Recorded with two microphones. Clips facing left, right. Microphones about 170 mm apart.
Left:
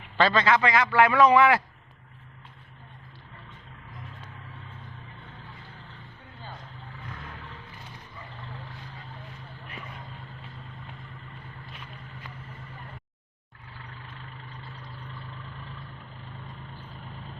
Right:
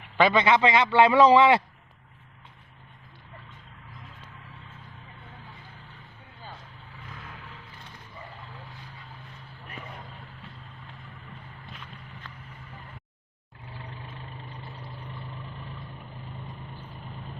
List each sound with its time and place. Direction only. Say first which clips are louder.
0.2 s a man's voice: right 2 dB; 20° right (ahead or behind)
11.7 s vehicle: left 1 dB; 10° left (ahead or behind)